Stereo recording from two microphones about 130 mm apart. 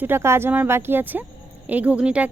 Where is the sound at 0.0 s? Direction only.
20° right (ahead or behind).